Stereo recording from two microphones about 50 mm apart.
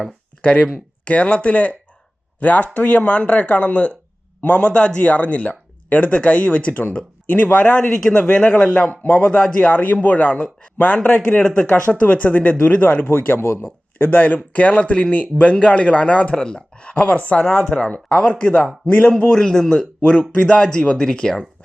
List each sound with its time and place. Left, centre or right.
0.4 s speech: left
9.6 s speech: left
13.1 s speech: left
13.4 s a man's voice: left
14.0 s speech: left
17.4 s speech: centre
17.7 s speech: left
19.2 s speech: centre